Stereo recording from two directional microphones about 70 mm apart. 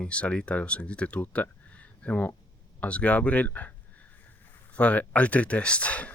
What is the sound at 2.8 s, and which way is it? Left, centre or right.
Speech, centre.